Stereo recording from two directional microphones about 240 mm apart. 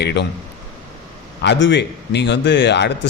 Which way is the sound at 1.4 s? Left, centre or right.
Left.